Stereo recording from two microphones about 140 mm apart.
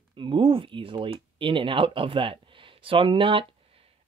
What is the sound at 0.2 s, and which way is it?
Speech, 40° right (ahead or behind).